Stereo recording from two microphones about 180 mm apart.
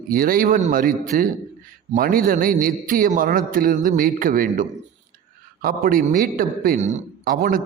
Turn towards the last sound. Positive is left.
turn(degrees=-50)  # may be behind; listen again after turning